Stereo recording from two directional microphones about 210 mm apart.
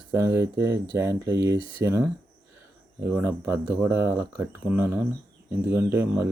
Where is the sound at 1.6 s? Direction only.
25° left (ahead or behind).